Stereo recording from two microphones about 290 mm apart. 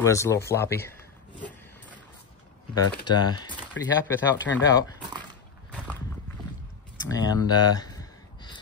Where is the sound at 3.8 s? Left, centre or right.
Left.